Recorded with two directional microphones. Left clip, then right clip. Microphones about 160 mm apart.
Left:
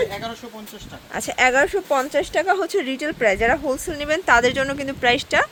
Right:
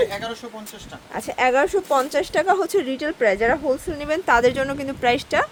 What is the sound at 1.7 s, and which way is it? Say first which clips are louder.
Speech: right 1 dB; 15° right (ahead or behind).